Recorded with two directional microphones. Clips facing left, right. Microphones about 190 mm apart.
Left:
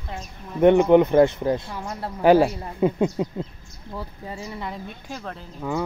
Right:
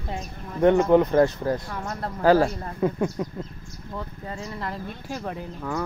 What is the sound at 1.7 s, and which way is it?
Speech, 10° left (ahead or behind).